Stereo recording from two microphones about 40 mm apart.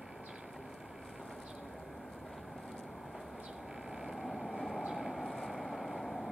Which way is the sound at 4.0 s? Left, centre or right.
Centre.